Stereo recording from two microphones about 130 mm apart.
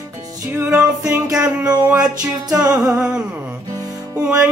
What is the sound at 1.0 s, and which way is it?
Music, 25° right (ahead or behind).